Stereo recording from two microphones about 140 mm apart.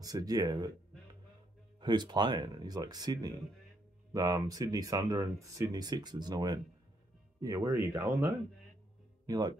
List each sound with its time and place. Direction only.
0.0 s speech: 25° right (ahead or behind)
1.8 s speech: 30° right (ahead or behind)